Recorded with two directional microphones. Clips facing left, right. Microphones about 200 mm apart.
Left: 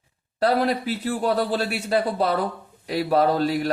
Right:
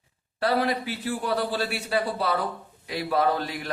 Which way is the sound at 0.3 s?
45° left (ahead or behind).